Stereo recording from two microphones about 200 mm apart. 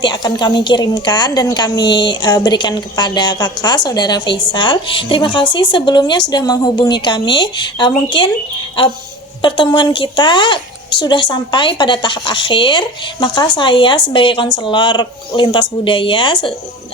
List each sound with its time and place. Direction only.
0.0 s a woman's voice: 20° left (ahead or behind)
9.4 s a woman's voice: 25° left (ahead or behind)